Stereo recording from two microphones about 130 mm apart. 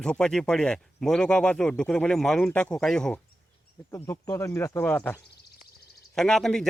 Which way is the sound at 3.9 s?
25° left (ahead or behind).